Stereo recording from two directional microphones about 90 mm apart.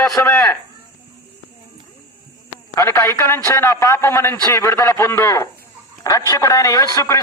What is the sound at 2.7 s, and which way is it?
A man's voice, 30° left (ahead or behind).